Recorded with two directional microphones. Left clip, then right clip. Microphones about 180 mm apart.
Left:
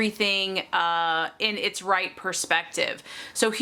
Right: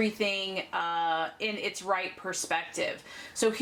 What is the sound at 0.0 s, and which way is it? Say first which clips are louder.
Speech: left 5 dB; 30° left (ahead or behind).